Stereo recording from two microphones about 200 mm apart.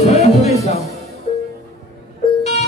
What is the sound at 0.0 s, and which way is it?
Music, 30° left (ahead or behind).